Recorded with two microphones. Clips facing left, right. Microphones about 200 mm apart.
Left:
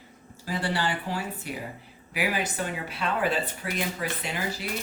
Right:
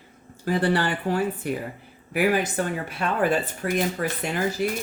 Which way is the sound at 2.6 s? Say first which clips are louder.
Right 5 dB; 50° right (ahead or behind).